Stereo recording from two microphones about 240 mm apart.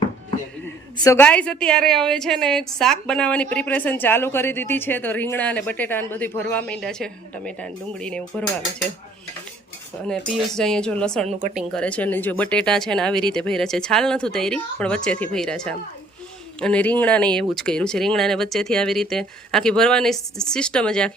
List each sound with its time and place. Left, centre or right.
0.9 s a woman's voice: centre
10.1 s speech: centre
11.3 s speech: right
11.5 s speech: centre